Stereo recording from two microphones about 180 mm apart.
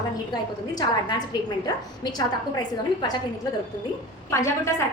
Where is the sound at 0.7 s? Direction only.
20° left (ahead or behind).